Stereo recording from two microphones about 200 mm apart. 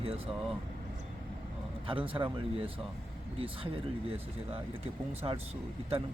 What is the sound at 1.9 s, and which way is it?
Speech, 25° right (ahead or behind).